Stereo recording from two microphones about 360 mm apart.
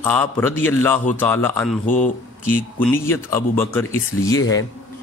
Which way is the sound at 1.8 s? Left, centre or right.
Left.